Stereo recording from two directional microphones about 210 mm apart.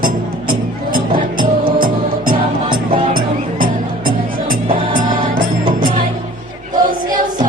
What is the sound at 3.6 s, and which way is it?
Music, 40° right (ahead or behind).